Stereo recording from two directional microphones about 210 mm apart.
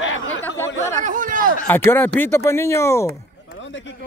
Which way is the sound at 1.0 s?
40° right (ahead or behind).